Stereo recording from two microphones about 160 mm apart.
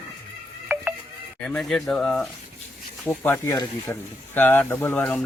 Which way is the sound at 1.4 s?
5° left (ahead or behind).